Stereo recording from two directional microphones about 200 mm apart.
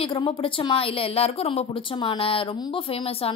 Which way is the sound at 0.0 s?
25° left (ahead or behind).